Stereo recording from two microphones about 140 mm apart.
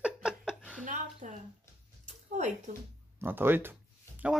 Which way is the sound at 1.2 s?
60° right (ahead or behind).